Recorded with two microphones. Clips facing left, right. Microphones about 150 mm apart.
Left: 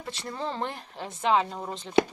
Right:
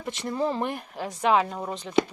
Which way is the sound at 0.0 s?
15° right (ahead or behind).